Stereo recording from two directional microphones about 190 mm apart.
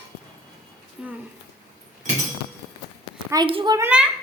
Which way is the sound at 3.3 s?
25° right (ahead or behind).